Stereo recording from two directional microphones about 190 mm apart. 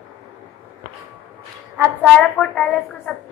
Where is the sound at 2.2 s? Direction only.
5° left (ahead or behind).